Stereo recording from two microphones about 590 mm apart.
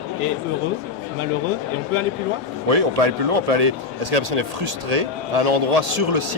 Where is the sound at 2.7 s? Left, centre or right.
Right.